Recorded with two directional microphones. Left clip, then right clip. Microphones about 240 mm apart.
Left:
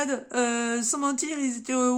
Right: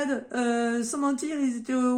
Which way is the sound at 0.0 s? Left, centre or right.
Left.